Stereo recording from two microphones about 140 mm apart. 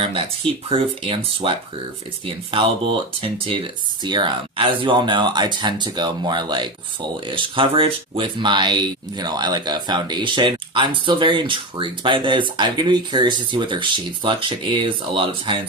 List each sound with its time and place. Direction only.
0.7 s speech: 40° right (ahead or behind)